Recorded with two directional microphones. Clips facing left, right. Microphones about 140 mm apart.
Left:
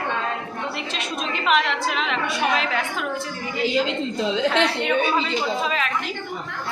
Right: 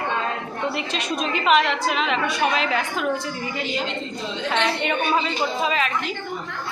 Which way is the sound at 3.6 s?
90° left.